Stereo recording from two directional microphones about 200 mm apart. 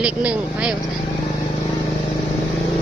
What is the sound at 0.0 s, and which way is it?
Speech, 5° right (ahead or behind).